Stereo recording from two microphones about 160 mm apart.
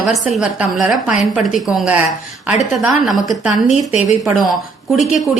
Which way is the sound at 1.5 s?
5° right (ahead or behind).